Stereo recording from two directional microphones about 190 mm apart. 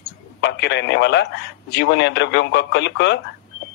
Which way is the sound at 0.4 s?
65° left (ahead or behind).